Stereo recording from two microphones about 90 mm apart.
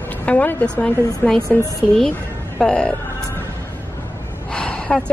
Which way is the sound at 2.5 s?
10° left (ahead or behind).